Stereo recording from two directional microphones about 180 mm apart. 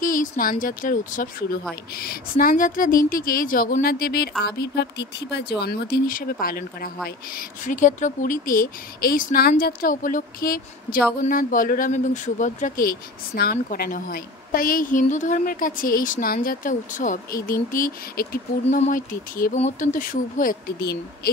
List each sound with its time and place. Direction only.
0.0 s speech: 50° left (ahead or behind)